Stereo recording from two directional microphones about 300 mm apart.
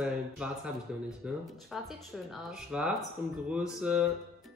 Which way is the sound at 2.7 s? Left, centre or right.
Centre.